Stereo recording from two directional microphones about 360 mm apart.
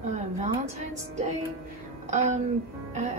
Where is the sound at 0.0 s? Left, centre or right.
Centre.